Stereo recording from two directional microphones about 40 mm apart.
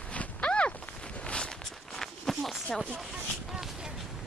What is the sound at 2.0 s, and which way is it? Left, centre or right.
Walk, centre.